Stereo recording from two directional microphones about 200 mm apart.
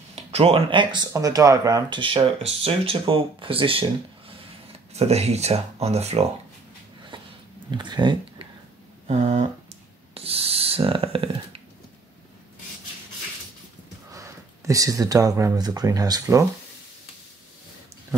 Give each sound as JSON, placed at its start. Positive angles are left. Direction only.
{"t": 0.1, "sound": "speech", "side_deg": -30}
{"t": 4.9, "sound": "speech", "side_deg": -30}
{"t": 7.7, "sound": "speech", "side_deg": -20}
{"t": 9.0, "sound": "a sound", "side_deg": -30}
{"t": 14.1, "sound": "speech", "side_deg": -15}